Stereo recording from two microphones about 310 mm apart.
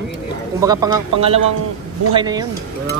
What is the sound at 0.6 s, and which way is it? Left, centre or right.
A man's voice, centre.